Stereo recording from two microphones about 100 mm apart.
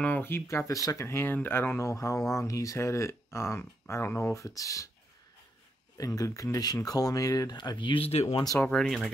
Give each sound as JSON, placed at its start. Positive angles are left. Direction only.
{"t": 0.0, "sound": "speech", "side_deg": 20}
{"t": 5.9, "sound": "speech", "side_deg": 35}
{"t": 7.5, "sound": "speech", "side_deg": 50}
{"t": 8.6, "sound": "speech", "side_deg": 5}